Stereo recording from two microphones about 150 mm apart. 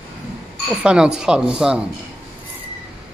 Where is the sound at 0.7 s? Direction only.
5° right (ahead or behind).